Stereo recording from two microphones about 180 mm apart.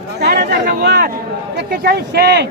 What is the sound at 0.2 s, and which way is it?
Speech, 60° right (ahead or behind).